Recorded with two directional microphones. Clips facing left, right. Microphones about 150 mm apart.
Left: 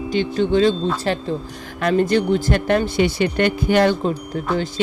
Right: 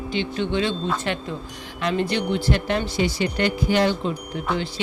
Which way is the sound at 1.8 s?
50° left (ahead or behind).